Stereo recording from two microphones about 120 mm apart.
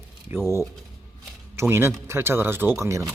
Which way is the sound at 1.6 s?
20° right (ahead or behind).